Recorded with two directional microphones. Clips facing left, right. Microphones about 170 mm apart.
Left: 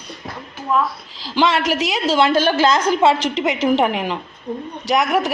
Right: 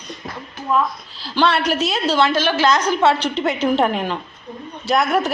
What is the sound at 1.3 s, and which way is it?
A woman's voice, 15° left (ahead or behind).